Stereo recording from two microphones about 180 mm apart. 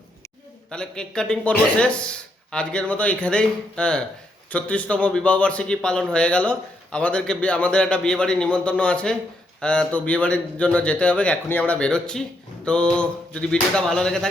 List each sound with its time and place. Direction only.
0.7 s a man's voice: 5° left (ahead or behind)